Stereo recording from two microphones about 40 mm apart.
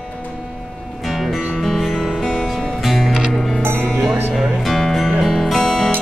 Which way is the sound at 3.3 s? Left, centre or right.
Centre.